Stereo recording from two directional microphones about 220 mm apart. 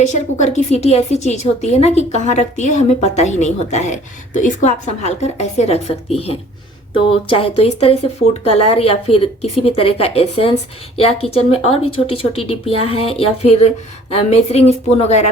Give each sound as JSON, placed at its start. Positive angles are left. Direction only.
{"t": 0.0, "sound": "a woman's voice", "side_deg": 30}